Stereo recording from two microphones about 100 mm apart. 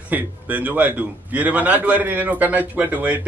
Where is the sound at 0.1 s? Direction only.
15° right (ahead or behind).